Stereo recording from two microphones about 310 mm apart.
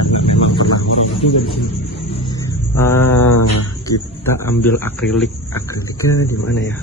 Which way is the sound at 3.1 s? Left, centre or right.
Left.